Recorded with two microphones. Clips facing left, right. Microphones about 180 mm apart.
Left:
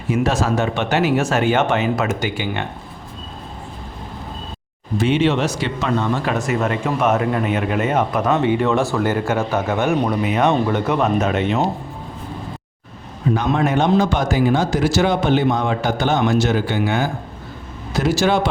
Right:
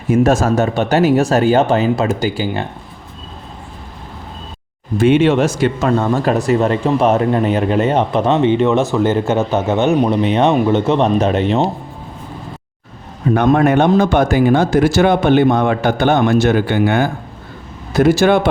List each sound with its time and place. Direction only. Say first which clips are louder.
0.1 s speech: right 6 dB; 45° right (ahead or behind)
4.9 s speech: right 6 dB; 55° right (ahead or behind); by 11.6 s 35° right (ahead or behind)
13.3 s a man's voice: right 7 dB; 60° right (ahead or behind)